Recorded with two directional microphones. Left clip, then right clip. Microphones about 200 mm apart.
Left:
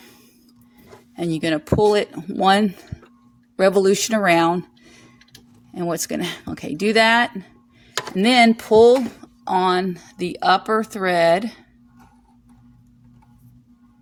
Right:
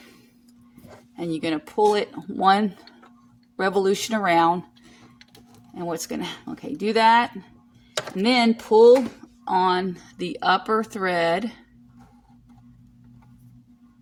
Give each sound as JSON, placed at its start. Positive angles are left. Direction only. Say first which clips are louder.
{"t": 1.1, "sound": "speech", "louder": "left 4 dB", "side_deg": 35}
{"t": 5.7, "sound": "speech", "louder": "left 5 dB", "side_deg": 35}